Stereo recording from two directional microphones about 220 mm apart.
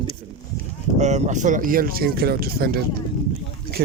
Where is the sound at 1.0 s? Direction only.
30° right (ahead or behind).